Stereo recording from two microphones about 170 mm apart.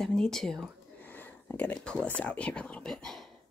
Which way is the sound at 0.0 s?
5° left (ahead or behind).